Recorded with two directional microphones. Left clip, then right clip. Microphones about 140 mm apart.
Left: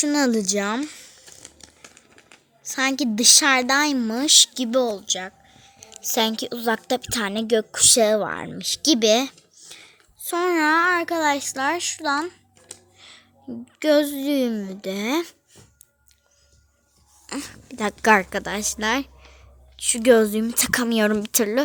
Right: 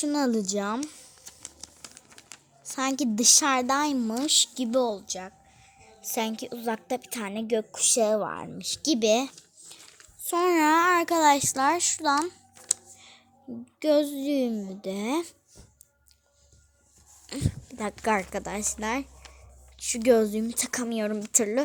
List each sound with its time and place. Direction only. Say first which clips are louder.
0.0 s a sound: left 6 dB; 5° left (ahead or behind)
2.0 s speech: right 1 dB; centre (ahead or behind)
10.2 s a child's voice: left 2 dB; 10° right (ahead or behind)
13.0 s a sound: left 6 dB; 5° right (ahead or behind)
13.5 s a woman's voice: left 5 dB; 5° left (ahead or behind)
17.2 s a sound: left 3 dB; 10° left (ahead or behind)
18.0 s a woman's voice: left 10 dB; 20° left (ahead or behind)
18.3 s a woman's voice: left 6 dB; 5° left (ahead or behind)
20.8 s a woman's voice: left 9 dB; 30° left (ahead or behind)
21.2 s a woman's voice: left 4 dB; 5° left (ahead or behind)